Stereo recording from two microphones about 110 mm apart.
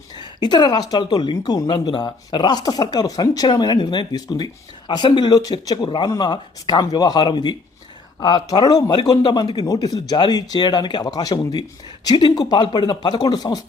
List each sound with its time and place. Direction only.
0.2 s speech: 40° left (ahead or behind)